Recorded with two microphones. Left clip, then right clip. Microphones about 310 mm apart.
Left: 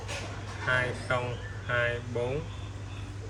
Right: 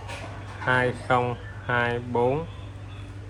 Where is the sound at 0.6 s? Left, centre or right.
Centre.